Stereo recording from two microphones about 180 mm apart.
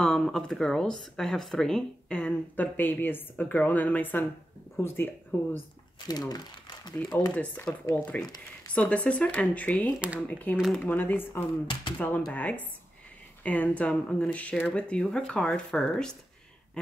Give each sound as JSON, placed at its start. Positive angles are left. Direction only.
{"t": 0.0, "sound": "speech", "side_deg": 5}
{"t": 6.0, "sound": "speech", "side_deg": 20}
{"t": 6.9, "sound": "speech", "side_deg": 0}
{"t": 9.9, "sound": "speech", "side_deg": -5}
{"t": 10.2, "sound": "speech", "side_deg": 10}
{"t": 11.6, "sound": "speech", "side_deg": 25}
{"t": 12.3, "sound": "speech", "side_deg": 10}
{"t": 16.8, "sound": "a sound", "side_deg": 5}